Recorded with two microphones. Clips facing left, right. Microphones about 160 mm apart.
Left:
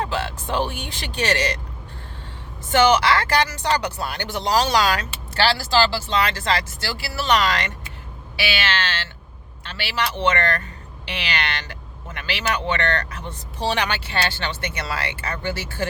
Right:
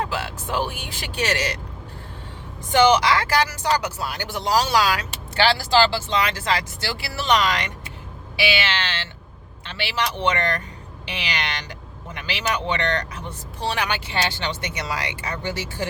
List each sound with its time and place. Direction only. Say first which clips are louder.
0.0 s speech: left 2 dB; 10° right (ahead or behind)
2.6 s speech: even; 15° right (ahead or behind)
5.3 s speech: right 1 dB; 15° right (ahead or behind)
13.6 s speech: left 2 dB; centre (ahead or behind)